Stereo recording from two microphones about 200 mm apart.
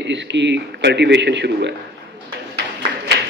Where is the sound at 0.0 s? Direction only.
60° right (ahead or behind).